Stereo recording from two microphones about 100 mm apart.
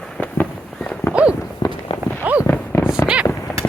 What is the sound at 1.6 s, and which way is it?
Walk, 45° left (ahead or behind).